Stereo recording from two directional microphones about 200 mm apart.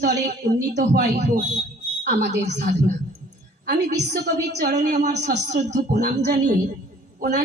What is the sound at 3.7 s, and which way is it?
A woman's voice, 55° right (ahead or behind).